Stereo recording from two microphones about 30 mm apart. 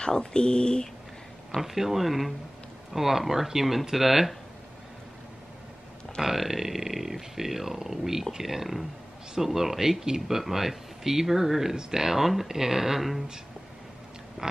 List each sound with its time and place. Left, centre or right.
0.0 s speech: left
1.6 s speech: centre
6.2 s speech: centre
14.4 s pig: right